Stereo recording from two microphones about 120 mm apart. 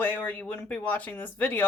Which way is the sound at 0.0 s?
15° left (ahead or behind).